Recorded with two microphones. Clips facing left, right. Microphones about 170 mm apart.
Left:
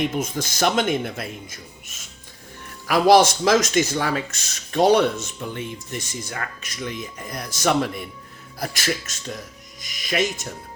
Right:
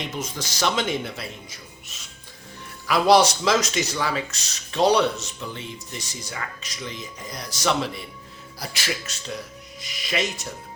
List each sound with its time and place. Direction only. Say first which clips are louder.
0.0 s speech: left 7 dB; 55° left (ahead or behind)